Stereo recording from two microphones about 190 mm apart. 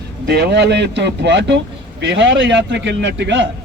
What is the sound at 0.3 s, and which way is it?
A man's voice, 60° right (ahead or behind).